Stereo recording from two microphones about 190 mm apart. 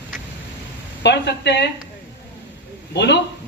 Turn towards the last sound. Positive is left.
turn(degrees=65)  # may be behind; listen again after turning